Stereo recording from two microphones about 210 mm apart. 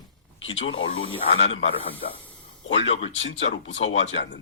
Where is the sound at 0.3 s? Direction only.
65° left (ahead or behind).